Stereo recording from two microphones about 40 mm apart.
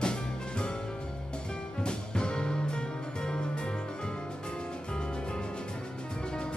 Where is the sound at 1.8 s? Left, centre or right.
Left.